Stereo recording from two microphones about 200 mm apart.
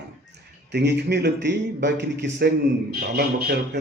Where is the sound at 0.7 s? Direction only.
55° right (ahead or behind).